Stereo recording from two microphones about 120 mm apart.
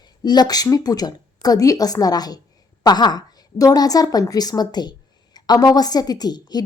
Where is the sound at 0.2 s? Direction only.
35° left (ahead or behind).